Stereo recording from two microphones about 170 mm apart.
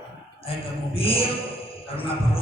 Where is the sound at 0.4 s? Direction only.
35° left (ahead or behind).